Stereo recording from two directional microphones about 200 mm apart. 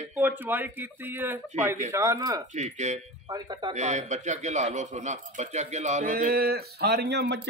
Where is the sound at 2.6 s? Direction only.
35° right (ahead or behind).